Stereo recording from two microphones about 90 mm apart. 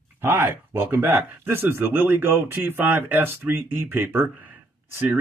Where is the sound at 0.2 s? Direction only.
25° right (ahead or behind).